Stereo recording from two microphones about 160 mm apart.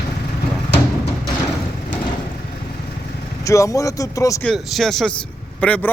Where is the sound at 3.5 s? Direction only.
20° left (ahead or behind).